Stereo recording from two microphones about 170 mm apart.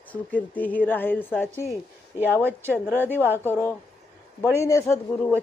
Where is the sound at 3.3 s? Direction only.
10° left (ahead or behind).